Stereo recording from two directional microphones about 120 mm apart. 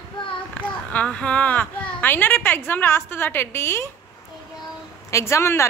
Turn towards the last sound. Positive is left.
turn(degrees=20)  # may be behind; listen again after turning